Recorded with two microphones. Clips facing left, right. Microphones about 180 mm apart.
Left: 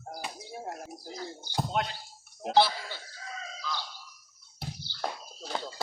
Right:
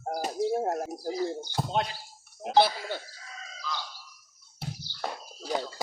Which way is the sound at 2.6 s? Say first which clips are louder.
Right 2 dB; 50° right (ahead or behind).